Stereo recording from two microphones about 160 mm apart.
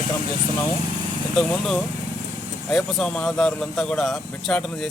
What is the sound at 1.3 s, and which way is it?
A man's voice, 5° left (ahead or behind).